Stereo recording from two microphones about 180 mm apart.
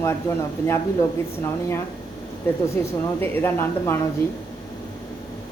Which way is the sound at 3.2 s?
10° left (ahead or behind).